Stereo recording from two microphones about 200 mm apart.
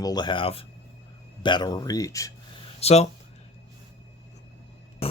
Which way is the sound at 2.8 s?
30° left (ahead or behind).